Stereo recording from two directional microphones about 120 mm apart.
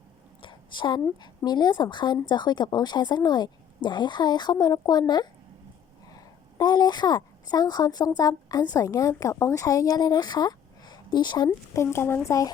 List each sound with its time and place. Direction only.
0.4 s a sound: 40° left (ahead or behind)
1.5 s a woman's voice: 35° left (ahead or behind)
11.4 s speech: 20° left (ahead or behind)